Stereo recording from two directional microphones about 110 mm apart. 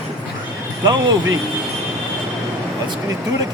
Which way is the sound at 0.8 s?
35° right (ahead or behind).